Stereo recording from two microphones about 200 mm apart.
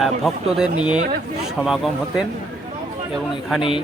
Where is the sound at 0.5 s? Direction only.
5° right (ahead or behind).